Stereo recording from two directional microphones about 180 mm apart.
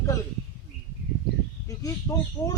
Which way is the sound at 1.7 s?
20° left (ahead or behind).